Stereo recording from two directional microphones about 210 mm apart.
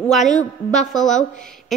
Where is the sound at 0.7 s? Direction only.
Centre (ahead or behind).